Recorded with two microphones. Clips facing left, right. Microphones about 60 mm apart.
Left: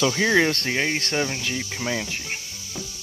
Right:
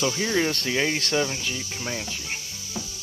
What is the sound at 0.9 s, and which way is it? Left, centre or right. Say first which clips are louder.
Speech: even; left.